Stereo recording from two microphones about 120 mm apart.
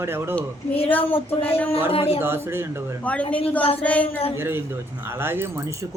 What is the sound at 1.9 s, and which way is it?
Speech, 55° left (ahead or behind).